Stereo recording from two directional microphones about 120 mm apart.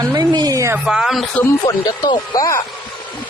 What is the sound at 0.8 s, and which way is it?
Speech, 5° right (ahead or behind).